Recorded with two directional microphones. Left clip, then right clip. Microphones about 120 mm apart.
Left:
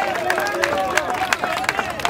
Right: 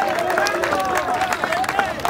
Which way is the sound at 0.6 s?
15° left (ahead or behind).